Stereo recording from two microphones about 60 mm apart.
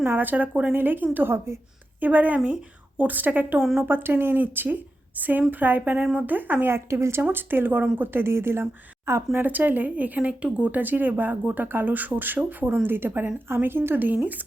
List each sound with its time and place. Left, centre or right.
0.0 s speech: right
3.6 s speech: centre
3.8 s speech: right
9.5 s speech: right